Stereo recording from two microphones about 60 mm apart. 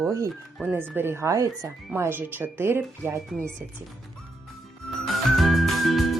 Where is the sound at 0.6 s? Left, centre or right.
Right.